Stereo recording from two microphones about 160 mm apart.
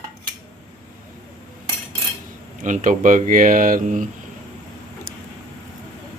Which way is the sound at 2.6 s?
55° right (ahead or behind).